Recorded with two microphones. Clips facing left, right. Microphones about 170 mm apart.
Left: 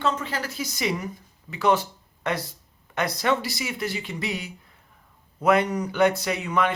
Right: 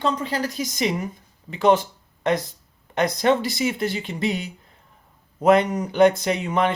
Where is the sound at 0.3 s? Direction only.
15° right (ahead or behind).